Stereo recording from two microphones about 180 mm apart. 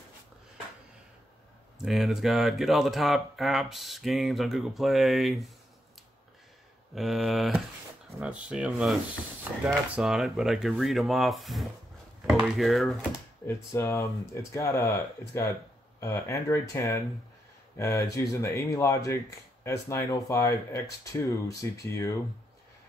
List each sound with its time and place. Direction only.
1.8 s speech: centre (ahead or behind)
7.0 s speech: centre (ahead or behind)
13.5 s speech: 15° left (ahead or behind)